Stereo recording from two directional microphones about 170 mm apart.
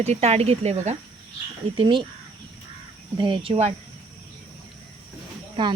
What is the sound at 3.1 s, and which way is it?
Speech, 25° right (ahead or behind).